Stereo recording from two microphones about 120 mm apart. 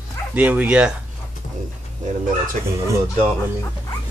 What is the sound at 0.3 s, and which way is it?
Speech, 15° right (ahead or behind).